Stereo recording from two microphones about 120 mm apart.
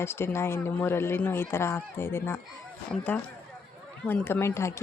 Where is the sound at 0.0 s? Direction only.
20° left (ahead or behind).